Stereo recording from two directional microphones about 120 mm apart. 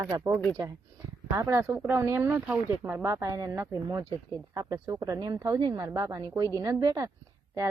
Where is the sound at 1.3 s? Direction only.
25° right (ahead or behind).